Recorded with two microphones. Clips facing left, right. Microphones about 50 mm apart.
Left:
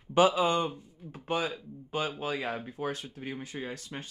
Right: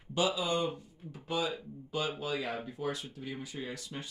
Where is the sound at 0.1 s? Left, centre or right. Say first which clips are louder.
Left 7 dB; left.